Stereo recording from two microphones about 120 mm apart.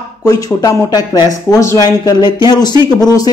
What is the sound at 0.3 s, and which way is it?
Speech, 30° left (ahead or behind).